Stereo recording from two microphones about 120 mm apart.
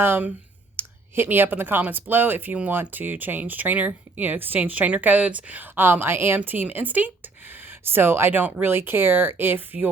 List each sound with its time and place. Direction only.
0.0 s speech: 15° right (ahead or behind)